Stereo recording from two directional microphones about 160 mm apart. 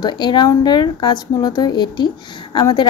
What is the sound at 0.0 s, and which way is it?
A woman's voice, 25° left (ahead or behind).